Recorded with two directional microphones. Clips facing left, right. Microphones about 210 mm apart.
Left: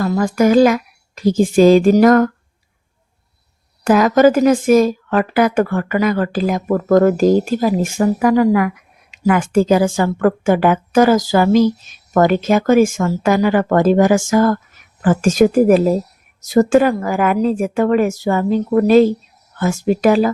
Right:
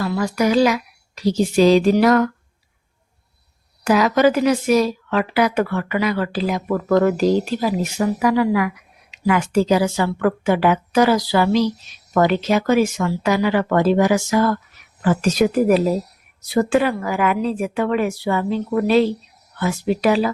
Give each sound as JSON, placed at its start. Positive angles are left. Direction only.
{"t": 0.0, "sound": "speech", "side_deg": 45}
{"t": 3.8, "sound": "speech", "side_deg": 50}